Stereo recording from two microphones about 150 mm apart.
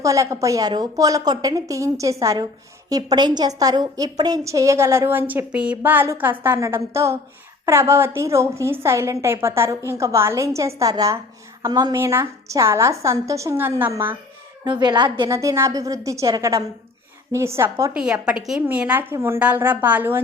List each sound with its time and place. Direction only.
0.0 s a woman's voice: 20° right (ahead or behind)
14.6 s a woman's voice: 30° right (ahead or behind)
15.3 s a woman's voice: 20° right (ahead or behind)
17.9 s a woman's voice: 5° right (ahead or behind)